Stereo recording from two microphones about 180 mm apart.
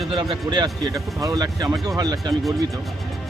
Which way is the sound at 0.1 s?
30° right (ahead or behind).